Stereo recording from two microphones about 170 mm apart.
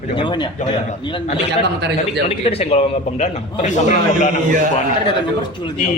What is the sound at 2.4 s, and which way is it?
Speech, 35° left (ahead or behind).